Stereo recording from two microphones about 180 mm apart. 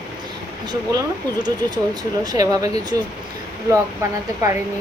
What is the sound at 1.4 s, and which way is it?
A woman's voice, 20° right (ahead or behind).